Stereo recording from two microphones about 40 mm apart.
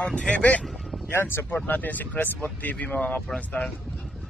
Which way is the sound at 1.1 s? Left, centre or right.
Left.